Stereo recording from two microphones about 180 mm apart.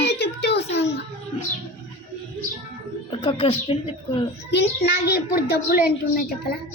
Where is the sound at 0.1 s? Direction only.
70° left (ahead or behind).